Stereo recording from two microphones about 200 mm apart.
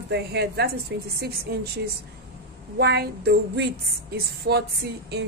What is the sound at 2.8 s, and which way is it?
A woman's voice, 55° right (ahead or behind).